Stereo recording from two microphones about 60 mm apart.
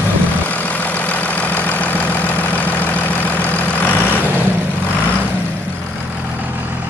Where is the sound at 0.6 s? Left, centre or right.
Left.